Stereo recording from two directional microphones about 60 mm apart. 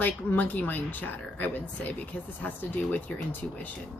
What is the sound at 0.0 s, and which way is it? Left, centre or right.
Speech, left.